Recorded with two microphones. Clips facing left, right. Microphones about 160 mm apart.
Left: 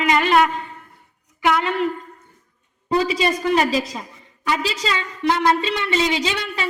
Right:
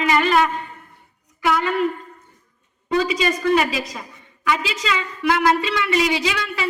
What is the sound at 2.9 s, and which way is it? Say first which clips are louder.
A woman's voice: left 1 dB; 35° left (ahead or behind).